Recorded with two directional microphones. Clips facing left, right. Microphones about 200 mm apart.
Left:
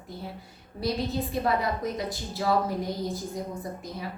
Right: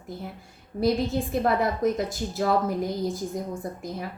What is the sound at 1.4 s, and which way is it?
A woman's voice, 50° right (ahead or behind).